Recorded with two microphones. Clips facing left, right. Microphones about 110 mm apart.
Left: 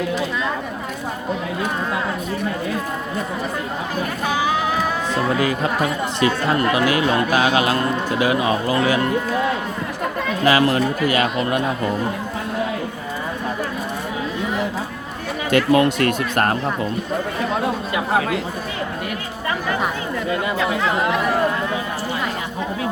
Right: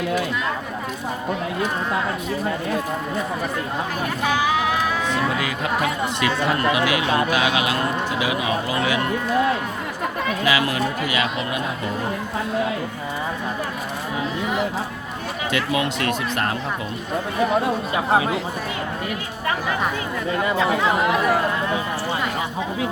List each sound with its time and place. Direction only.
5.4 s speech: 35° left (ahead or behind)
10.4 s speech: 35° left (ahead or behind)
15.5 s speech: 45° left (ahead or behind)